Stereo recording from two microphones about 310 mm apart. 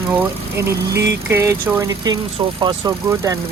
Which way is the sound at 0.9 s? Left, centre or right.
Right.